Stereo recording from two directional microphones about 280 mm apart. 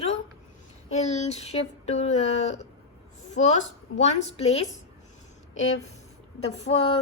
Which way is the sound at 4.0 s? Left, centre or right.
Left.